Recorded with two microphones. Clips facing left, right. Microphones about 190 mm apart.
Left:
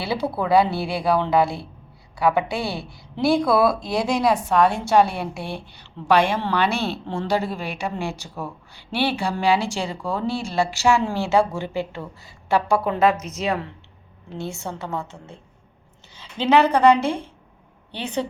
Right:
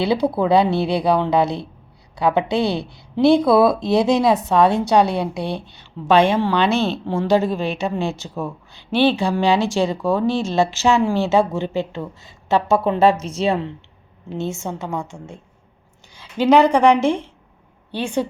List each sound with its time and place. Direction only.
0.0 s a woman's voice: 20° right (ahead or behind)
14.3 s a woman's voice: 20° right (ahead or behind)